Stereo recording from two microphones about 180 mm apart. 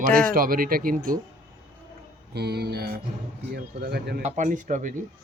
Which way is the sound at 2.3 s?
65° right (ahead or behind).